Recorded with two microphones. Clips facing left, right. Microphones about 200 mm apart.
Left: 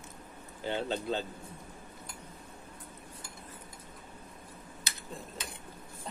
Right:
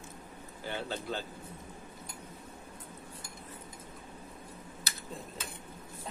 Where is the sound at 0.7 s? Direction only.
20° left (ahead or behind).